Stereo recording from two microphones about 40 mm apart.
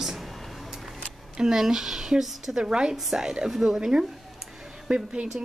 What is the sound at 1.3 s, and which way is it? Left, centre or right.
Speech, centre.